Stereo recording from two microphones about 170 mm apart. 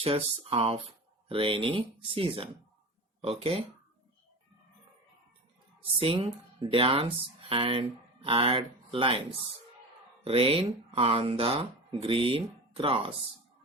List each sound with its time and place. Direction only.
0.0 s speech: 35° right (ahead or behind)
6.0 s speech: 35° right (ahead or behind)
10.2 s speech: 35° right (ahead or behind)